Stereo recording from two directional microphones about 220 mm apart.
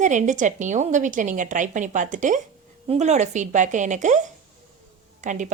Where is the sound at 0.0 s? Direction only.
35° right (ahead or behind).